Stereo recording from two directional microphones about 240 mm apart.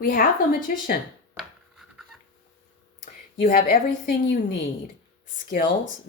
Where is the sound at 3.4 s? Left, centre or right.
Left.